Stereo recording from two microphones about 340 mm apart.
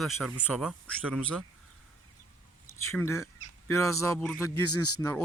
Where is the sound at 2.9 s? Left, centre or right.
Centre.